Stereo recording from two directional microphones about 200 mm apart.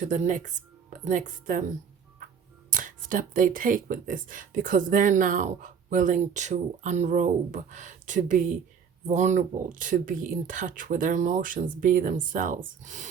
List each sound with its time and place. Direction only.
0.0 s speech: 40° right (ahead or behind)